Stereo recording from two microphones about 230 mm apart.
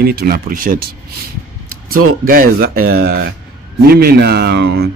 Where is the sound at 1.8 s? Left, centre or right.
Right.